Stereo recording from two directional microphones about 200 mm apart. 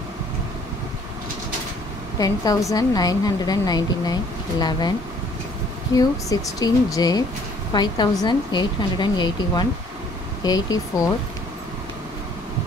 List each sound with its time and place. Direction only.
2.1 s a woman's voice: 20° left (ahead or behind)
5.9 s a woman's voice: 15° left (ahead or behind)